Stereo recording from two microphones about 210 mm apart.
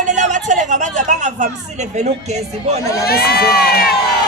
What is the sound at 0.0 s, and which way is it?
Speech, 35° right (ahead or behind).